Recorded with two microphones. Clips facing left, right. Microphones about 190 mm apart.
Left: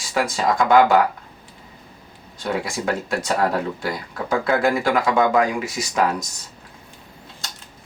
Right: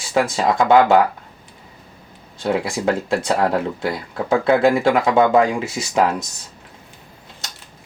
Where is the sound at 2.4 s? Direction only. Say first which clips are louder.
Right 4 dB; 25° right (ahead or behind).